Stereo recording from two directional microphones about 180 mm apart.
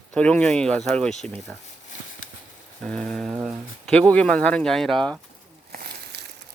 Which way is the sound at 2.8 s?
5° left (ahead or behind).